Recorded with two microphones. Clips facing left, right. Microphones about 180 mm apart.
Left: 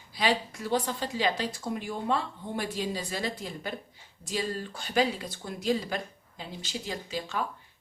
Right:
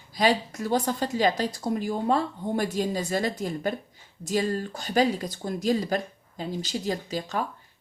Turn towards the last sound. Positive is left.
turn(degrees=-40)  # may be behind; listen again after turning